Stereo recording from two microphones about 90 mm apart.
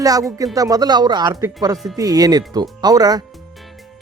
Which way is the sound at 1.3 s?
35° right (ahead or behind).